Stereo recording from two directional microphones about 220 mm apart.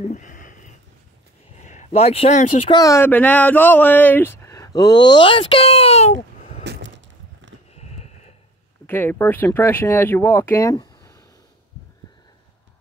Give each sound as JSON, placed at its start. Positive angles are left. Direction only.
{"t": 0.1, "sound": "a sound", "side_deg": 35}
{"t": 1.6, "sound": "speech", "side_deg": 30}
{"t": 2.8, "sound": "speech", "side_deg": 10}
{"t": 6.6, "sound": "a sound", "side_deg": -50}
{"t": 7.7, "sound": "horse", "side_deg": 30}
{"t": 8.8, "sound": "speech", "side_deg": 10}